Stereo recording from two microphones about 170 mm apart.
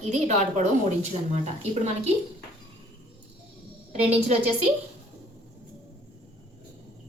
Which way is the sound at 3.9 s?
40° right (ahead or behind).